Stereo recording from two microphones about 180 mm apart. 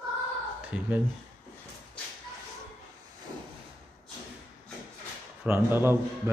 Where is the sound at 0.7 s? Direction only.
5° right (ahead or behind).